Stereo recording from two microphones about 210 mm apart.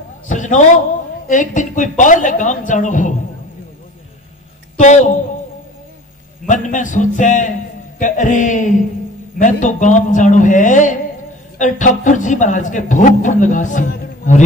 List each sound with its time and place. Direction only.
0.3 s a sound: 35° left (ahead or behind)
1.2 s a man's voice: 35° left (ahead or behind)
4.7 s a man's voice: 35° left (ahead or behind)
6.4 s a man's voice: 35° left (ahead or behind)